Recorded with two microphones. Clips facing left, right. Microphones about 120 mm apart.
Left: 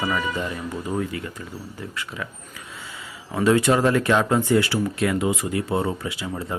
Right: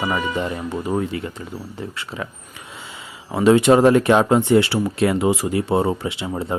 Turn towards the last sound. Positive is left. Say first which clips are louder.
# right 4 dB
turn(degrees=-25)  # may be behind; listen again after turning